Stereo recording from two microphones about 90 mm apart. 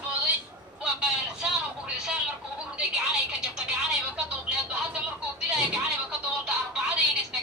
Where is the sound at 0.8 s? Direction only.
10° right (ahead or behind).